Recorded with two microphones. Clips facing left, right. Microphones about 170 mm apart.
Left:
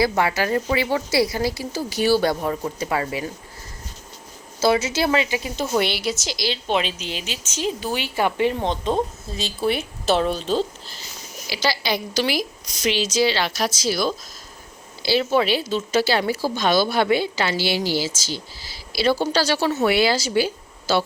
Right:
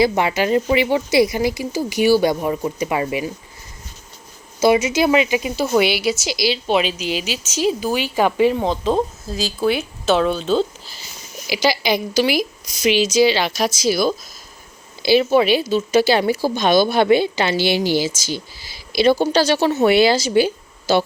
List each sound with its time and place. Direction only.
0.0 s speech: 20° right (ahead or behind)
4.6 s speech: 15° right (ahead or behind)
5.7 s speech: 5° right (ahead or behind)
8.5 s a woman's voice: 5° right (ahead or behind)
11.4 s speech: 15° right (ahead or behind)